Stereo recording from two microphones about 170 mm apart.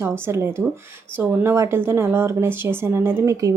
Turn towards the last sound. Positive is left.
turn(degrees=-20)  # may be behind; listen again after turning